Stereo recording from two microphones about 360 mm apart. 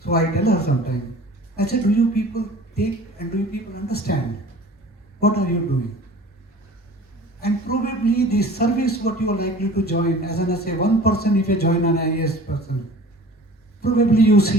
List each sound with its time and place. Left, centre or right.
0.0 s a man's voice: left
5.2 s a man's voice: left
7.4 s a man's voice: left
13.8 s a man's voice: left